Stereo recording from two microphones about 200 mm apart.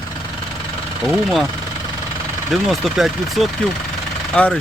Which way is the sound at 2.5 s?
Centre (ahead or behind).